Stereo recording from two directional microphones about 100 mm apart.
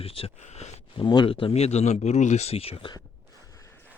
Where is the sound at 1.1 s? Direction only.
50° left (ahead or behind).